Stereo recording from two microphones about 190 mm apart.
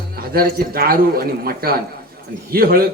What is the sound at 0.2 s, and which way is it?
A man's voice, 50° right (ahead or behind).